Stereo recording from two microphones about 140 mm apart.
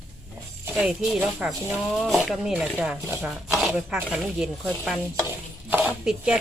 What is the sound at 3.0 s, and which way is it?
Speech, 20° right (ahead or behind).